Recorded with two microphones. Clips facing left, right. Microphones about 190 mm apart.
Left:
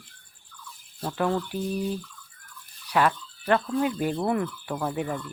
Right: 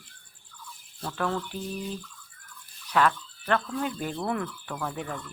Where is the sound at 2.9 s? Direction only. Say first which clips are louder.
Left 1 dB; 10° left (ahead or behind).